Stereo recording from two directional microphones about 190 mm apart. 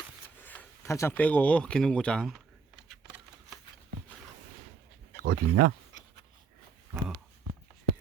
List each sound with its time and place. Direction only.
0.4 s speech: 10° left (ahead or behind)
5.2 s speech: 55° right (ahead or behind)